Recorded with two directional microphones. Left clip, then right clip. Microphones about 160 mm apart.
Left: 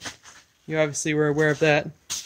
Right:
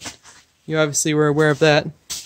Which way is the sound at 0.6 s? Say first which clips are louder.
Right 4 dB; 30° right (ahead or behind).